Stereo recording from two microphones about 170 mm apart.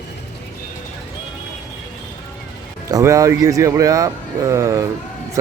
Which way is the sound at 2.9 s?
20° right (ahead or behind).